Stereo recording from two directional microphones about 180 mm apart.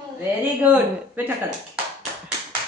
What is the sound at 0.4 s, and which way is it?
Speech, 10° right (ahead or behind).